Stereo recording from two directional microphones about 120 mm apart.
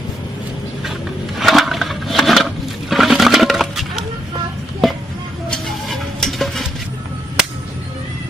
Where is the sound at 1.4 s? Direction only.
Centre (ahead or behind).